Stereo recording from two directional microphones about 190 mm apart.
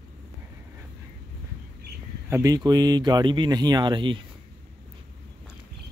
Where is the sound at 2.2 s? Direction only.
15° right (ahead or behind).